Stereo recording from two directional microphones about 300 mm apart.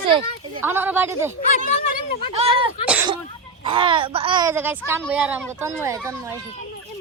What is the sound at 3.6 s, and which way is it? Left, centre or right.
A child's voice, centre.